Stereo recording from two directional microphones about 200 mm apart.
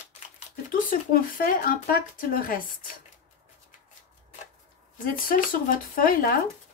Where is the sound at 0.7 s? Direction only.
45° left (ahead or behind).